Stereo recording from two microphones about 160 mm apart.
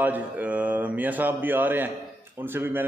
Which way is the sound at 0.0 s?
10° right (ahead or behind).